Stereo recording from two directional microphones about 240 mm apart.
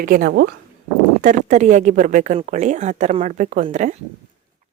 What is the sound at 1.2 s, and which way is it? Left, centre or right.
Speech, right.